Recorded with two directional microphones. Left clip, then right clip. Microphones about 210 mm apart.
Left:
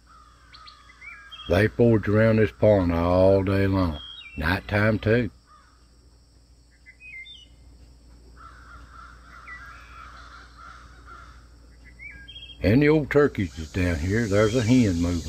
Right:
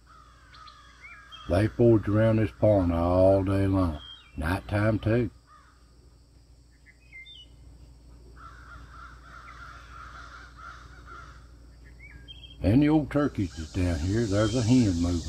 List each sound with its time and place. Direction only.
1.0 s crow: centre (ahead or behind)
1.5 s speech: 25° left (ahead or behind)
8.4 s crow: centre (ahead or behind)
12.6 s speech: 30° left (ahead or behind)